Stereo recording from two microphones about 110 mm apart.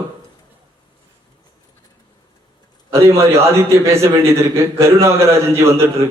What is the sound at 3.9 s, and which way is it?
A man's voice, 25° right (ahead or behind).